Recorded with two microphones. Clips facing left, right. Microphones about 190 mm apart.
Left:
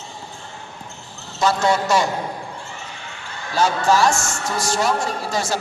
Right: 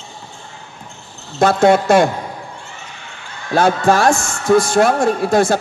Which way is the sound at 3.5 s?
55° right (ahead or behind).